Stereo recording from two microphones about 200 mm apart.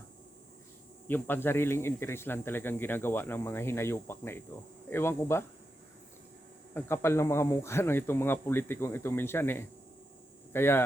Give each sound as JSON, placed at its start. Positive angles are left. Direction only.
{"t": 1.0, "sound": "speech", "side_deg": 10}
{"t": 6.7, "sound": "speech", "side_deg": 10}